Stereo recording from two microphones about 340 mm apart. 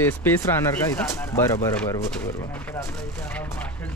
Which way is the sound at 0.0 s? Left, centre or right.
Centre.